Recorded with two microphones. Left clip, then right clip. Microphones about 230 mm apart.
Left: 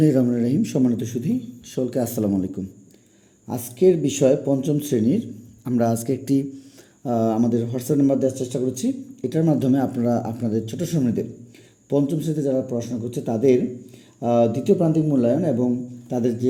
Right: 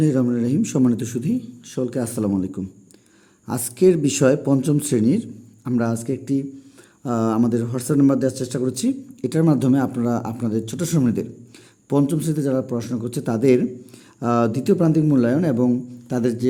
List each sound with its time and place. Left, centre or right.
0.0 s speech: centre
3.5 s a man's voice: right; by 6.4 s centre
7.0 s a man's voice: centre; by 15.5 s right
15.6 s a man's voice: right